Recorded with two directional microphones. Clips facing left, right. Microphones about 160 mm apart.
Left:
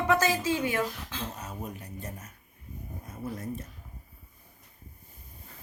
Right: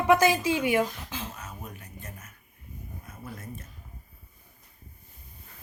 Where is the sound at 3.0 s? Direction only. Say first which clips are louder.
Left 7 dB; 35° left (ahead or behind).